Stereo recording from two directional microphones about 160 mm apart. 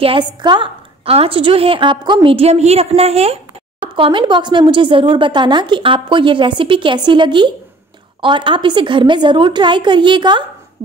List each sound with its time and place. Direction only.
0.0 s a woman's voice: 30° right (ahead or behind)